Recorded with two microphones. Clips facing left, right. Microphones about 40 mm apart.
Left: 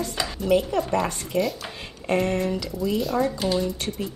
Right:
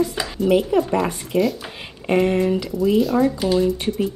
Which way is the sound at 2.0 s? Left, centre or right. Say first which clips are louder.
Right 5 dB; centre.